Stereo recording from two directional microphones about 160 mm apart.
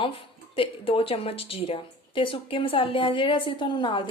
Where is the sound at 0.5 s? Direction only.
35° left (ahead or behind).